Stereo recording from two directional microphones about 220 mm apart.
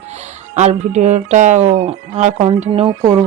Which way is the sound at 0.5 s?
30° right (ahead or behind).